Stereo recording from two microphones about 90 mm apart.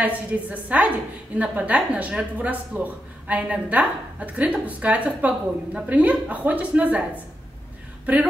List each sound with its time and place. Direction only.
0.0 s a woman's voice: 15° right (ahead or behind)